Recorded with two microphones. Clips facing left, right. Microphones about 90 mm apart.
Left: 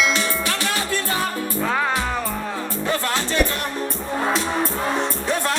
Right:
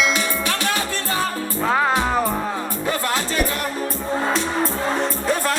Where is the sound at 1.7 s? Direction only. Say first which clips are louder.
Right 6 dB; 20° right (ahead or behind).